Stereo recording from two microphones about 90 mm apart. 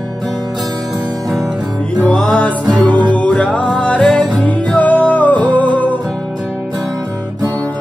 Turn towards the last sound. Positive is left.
turn(degrees=15)  # may be behind; listen again after turning